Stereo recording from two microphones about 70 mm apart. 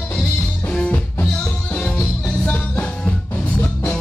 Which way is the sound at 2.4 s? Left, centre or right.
Centre.